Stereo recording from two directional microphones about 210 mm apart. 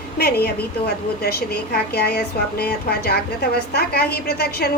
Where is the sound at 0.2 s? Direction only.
50° left (ahead or behind).